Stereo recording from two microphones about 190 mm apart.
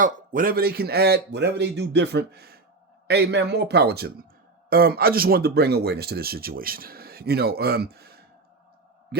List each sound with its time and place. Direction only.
0.0 s a man's voice: 45° right (ahead or behind)